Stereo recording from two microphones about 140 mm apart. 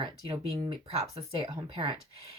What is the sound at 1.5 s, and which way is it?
Speech, 35° right (ahead or behind).